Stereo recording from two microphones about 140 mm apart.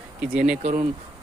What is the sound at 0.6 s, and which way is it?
Speech, 50° right (ahead or behind).